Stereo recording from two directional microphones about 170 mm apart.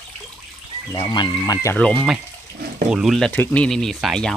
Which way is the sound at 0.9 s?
25° left (ahead or behind).